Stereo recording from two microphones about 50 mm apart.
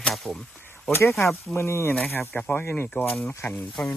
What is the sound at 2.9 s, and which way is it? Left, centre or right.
Speech, left.